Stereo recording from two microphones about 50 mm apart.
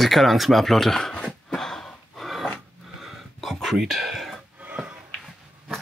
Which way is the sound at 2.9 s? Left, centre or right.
Centre.